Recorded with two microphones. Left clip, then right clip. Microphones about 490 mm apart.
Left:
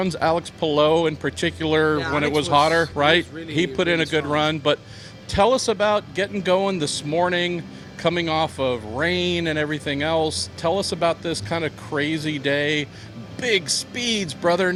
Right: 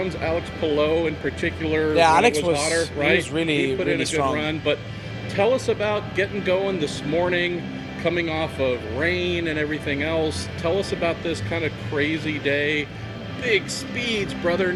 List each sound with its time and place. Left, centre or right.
0.0 s speech: left
2.0 s speech: centre
3.0 s a man's voice: left